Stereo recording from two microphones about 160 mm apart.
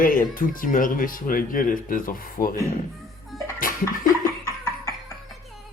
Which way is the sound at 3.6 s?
60° left (ahead or behind).